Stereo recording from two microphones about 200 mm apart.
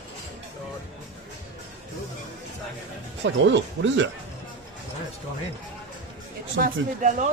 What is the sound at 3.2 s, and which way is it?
Speech, 65° right (ahead or behind).